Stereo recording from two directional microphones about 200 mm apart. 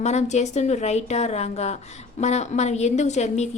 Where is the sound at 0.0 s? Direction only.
35° left (ahead or behind).